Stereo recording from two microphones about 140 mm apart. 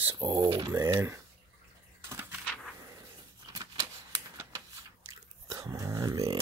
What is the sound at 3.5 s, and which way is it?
Typewriter, 25° right (ahead or behind).